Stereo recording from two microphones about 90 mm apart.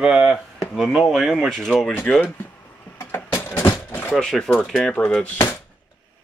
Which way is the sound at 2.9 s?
25° left (ahead or behind).